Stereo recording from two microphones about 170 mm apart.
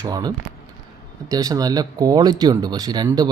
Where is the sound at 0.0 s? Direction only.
20° right (ahead or behind).